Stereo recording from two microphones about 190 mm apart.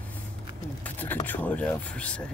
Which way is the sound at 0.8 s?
10° left (ahead or behind).